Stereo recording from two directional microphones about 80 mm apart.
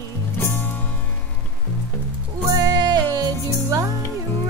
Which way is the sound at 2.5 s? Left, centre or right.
Right.